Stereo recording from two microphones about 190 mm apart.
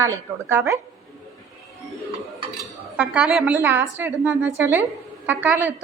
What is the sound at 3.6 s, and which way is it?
A woman's voice, 10° right (ahead or behind).